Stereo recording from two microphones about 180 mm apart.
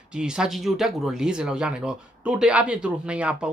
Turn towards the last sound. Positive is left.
turn(degrees=-5)  # may be behind; listen again after turning